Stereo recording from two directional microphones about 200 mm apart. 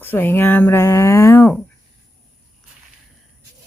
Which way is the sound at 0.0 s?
10° left (ahead or behind).